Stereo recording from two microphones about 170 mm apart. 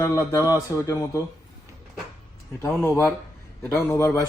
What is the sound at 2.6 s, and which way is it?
Speech, 15° left (ahead or behind).